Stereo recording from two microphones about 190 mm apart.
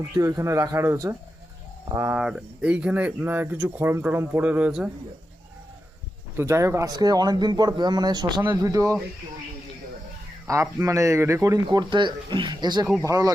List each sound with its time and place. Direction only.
0.2 s speech: 15° right (ahead or behind)
6.3 s speech: 15° right (ahead or behind)
10.4 s speech: 15° right (ahead or behind)